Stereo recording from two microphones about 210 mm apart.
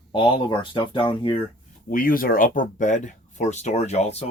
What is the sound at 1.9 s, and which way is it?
Speech, 40° left (ahead or behind).